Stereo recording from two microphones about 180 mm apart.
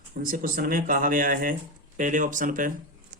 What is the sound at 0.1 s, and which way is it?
Speech, 50° right (ahead or behind).